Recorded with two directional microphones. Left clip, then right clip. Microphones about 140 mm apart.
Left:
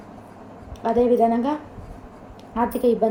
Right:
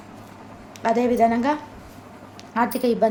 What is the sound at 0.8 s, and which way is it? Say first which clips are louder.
A woman's voice: left 1 dB; 30° right (ahead or behind).